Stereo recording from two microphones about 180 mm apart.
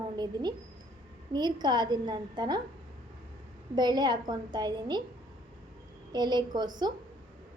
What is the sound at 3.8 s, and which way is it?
A woman's voice, 25° right (ahead or behind).